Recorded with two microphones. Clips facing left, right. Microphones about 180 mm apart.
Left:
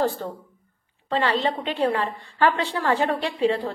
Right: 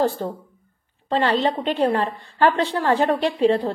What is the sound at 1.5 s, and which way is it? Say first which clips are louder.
A woman's voice: right 3 dB; 35° right (ahead or behind).